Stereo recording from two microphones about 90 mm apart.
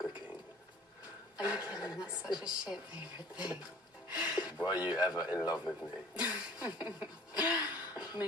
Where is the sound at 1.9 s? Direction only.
5° right (ahead or behind).